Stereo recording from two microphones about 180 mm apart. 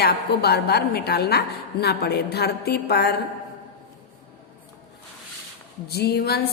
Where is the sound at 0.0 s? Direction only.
65° left (ahead or behind).